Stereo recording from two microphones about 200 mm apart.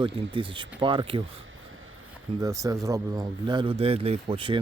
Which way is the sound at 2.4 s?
15° right (ahead or behind).